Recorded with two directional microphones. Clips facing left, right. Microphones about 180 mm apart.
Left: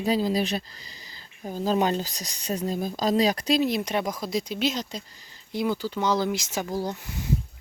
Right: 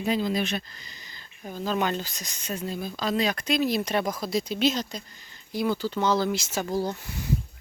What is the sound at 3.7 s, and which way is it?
Speech, 15° left (ahead or behind).